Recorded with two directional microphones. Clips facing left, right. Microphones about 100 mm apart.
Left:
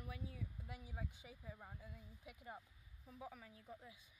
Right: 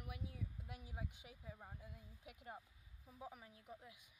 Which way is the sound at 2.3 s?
5° right (ahead or behind).